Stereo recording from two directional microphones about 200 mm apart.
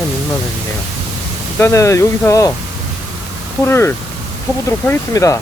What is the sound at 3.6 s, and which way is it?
Speech, 10° left (ahead or behind).